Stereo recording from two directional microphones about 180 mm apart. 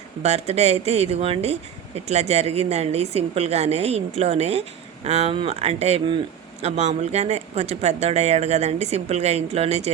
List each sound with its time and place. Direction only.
0.2 s speech: 35° right (ahead or behind)